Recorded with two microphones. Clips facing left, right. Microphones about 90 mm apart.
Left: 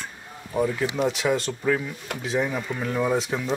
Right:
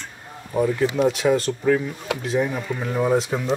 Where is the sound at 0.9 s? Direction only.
Centre (ahead or behind).